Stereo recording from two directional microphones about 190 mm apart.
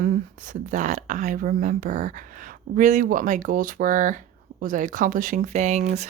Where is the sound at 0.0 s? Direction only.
45° right (ahead or behind).